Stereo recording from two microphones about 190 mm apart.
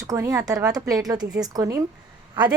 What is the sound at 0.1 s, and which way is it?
Speech, 15° right (ahead or behind).